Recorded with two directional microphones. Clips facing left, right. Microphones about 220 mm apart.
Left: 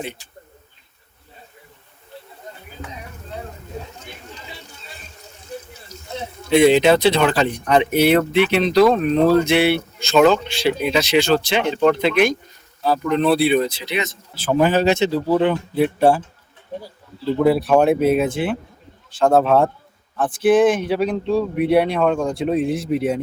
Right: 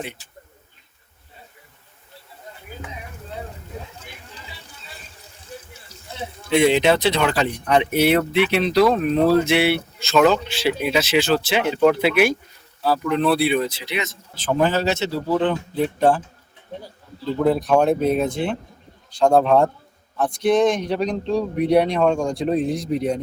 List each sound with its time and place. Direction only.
6.5 s speech: 35° left (ahead or behind)
7.9 s speech: centre (ahead or behind)
17.7 s speech: 5° left (ahead or behind)